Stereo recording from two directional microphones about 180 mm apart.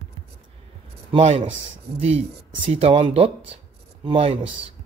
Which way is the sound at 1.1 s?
35° right (ahead or behind).